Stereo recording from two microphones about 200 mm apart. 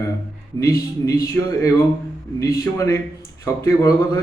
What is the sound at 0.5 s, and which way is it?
A man's voice, 15° left (ahead or behind).